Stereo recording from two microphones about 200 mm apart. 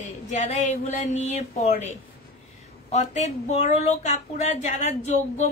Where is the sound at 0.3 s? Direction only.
35° left (ahead or behind).